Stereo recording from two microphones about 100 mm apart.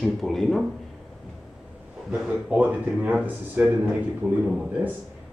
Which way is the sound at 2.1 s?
10° right (ahead or behind).